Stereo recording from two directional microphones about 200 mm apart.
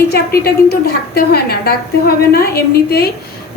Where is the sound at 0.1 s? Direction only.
50° left (ahead or behind).